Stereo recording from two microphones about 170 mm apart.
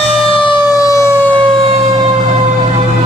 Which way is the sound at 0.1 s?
30° left (ahead or behind).